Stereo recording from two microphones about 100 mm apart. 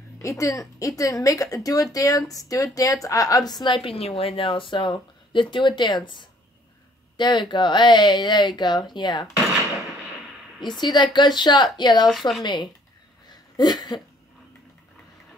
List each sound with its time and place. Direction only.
0.2 s a woman's voice: 30° left (ahead or behind); by 3.9 s 50° left (ahead or behind)
3.9 s speech: 75° left (ahead or behind); by 9.3 s 45° left (ahead or behind)
10.8 s speech: 45° left (ahead or behind)
12.1 s speech: centre (ahead or behind)
13.3 s a sound: 45° left (ahead or behind)